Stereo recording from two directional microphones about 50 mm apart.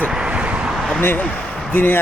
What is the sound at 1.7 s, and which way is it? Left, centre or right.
Speech, left.